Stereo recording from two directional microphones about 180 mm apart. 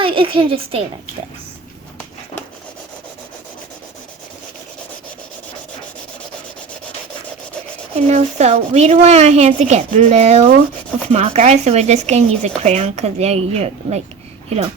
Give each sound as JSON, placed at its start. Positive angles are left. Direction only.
{"t": 0.0, "sound": "a woman's voice", "side_deg": -30}
{"t": 7.9, "sound": "speech", "side_deg": -35}